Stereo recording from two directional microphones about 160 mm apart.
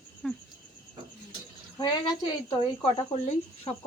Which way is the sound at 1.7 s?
25° left (ahead or behind).